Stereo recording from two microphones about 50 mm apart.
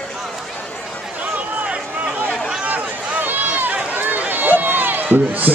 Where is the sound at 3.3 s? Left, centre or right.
Right.